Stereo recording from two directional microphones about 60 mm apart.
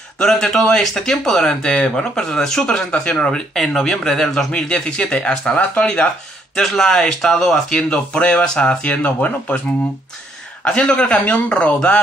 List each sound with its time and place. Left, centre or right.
0.2 s speech: centre
3.5 s speech: centre; by 9.6 s left
10.6 s speech: centre